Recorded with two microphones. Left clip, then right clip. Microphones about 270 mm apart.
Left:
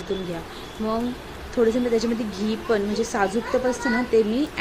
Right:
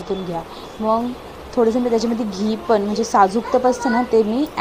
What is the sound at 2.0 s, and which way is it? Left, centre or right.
A woman's voice, centre.